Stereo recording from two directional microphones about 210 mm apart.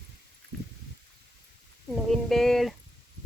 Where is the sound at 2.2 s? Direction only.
Centre (ahead or behind).